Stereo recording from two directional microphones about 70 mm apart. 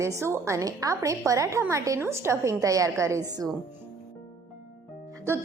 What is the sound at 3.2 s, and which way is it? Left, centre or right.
Speech, right.